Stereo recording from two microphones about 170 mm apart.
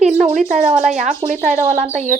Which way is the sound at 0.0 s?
45° right (ahead or behind).